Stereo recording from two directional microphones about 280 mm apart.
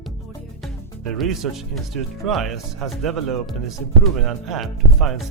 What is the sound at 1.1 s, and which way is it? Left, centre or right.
Speech, centre.